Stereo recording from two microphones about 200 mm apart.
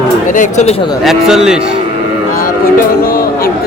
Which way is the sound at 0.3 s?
40° left (ahead or behind).